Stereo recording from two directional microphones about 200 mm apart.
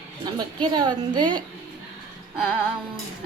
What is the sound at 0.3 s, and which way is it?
A woman's voice, 20° right (ahead or behind).